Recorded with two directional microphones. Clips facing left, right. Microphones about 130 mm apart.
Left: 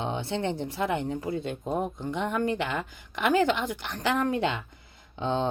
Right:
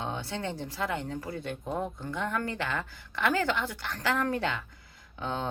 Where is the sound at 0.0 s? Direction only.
25° left (ahead or behind).